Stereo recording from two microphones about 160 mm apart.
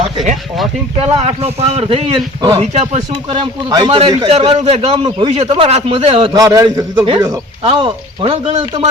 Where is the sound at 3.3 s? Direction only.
30° right (ahead or behind).